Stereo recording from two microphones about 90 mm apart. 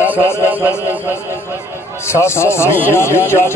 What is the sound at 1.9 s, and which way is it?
A man's voice, 30° left (ahead or behind).